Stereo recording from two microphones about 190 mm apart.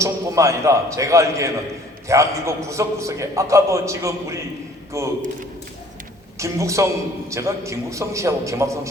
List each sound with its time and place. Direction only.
0.0 s a man's voice: 15° right (ahead or behind)
6.4 s a man's voice: 15° right (ahead or behind)